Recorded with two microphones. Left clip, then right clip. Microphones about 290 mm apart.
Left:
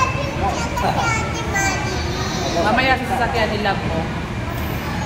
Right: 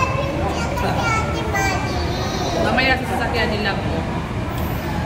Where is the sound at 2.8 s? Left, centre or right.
Centre.